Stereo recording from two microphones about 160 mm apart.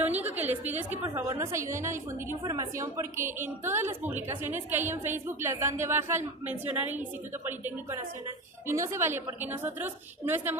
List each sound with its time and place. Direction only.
0.2 s a woman's voice: 10° right (ahead or behind)